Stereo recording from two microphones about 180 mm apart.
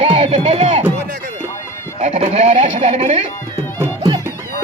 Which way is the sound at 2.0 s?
40° right (ahead or behind).